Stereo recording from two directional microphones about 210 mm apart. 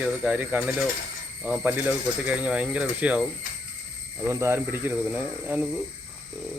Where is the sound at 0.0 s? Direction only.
5° right (ahead or behind).